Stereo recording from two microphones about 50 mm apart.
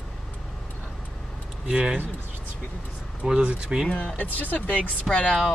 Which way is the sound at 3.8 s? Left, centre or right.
Left.